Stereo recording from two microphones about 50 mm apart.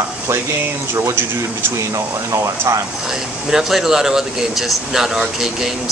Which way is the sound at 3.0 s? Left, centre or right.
Centre.